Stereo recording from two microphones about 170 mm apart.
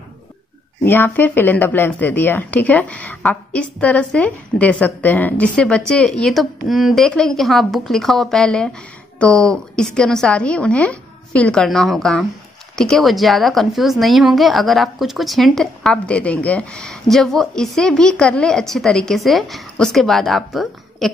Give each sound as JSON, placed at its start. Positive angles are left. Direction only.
{"t": 0.8, "sound": "a woman's voice", "side_deg": 10}